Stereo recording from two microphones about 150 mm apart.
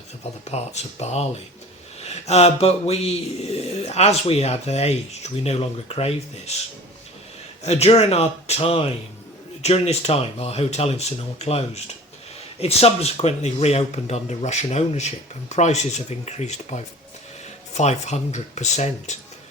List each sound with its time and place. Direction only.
0.4 s speech: 45° left (ahead or behind)
7.6 s speech: 45° left (ahead or behind)